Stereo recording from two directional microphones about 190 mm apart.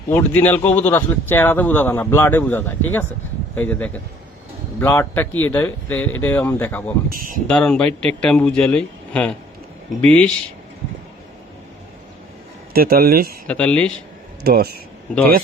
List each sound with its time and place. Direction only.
0.1 s speech: 10° left (ahead or behind)
7.1 s speech: 50° right (ahead or behind)
7.4 s speech: 5° left (ahead or behind)
12.7 s speech: 50° right (ahead or behind)
13.5 s speech: 5° left (ahead or behind)
14.4 s speech: 55° right (ahead or behind)